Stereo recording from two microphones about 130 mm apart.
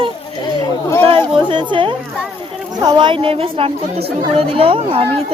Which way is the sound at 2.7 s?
30° right (ahead or behind).